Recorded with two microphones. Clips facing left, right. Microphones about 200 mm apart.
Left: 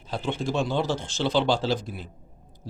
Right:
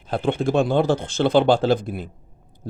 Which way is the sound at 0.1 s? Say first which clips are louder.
Right 7 dB; 55° right (ahead or behind).